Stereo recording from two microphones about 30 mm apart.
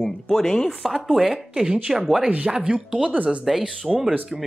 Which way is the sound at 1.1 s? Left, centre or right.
Centre.